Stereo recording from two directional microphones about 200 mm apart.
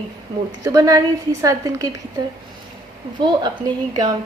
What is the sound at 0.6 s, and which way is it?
A woman's voice, 15° right (ahead or behind).